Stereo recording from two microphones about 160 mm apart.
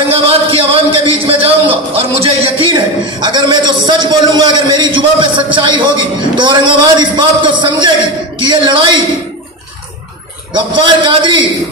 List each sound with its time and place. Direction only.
0.1 s speech: 35° right (ahead or behind)
10.5 s speech: 30° right (ahead or behind)